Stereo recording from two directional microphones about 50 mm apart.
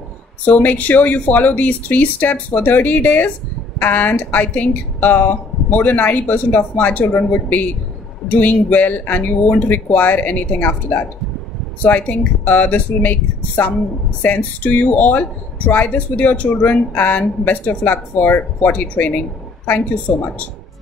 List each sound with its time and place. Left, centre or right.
0.5 s speech: left
8.3 s speech: left
11.8 s speech: left